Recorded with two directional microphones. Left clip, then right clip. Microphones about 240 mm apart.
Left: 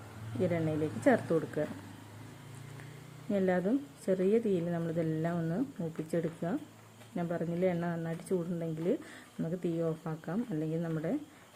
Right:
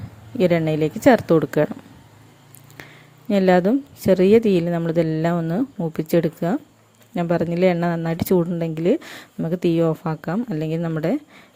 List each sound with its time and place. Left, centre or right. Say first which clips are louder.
0.4 s a woman's voice: right 14 dB; right
3.2 s a woman's voice: right 14 dB; right